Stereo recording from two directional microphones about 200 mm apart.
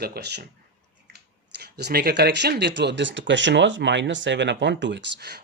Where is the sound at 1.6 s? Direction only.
55° right (ahead or behind).